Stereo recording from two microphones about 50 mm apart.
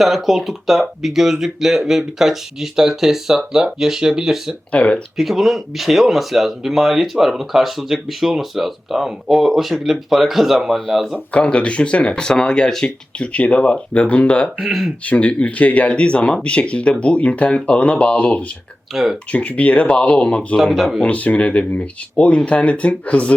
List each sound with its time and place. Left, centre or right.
0.0 s speech: centre
4.7 s speech: left
5.1 s speech: centre
11.3 s speech: left
14.7 s speech: centre
15.0 s speech: left
18.9 s speech: centre
19.3 s speech: left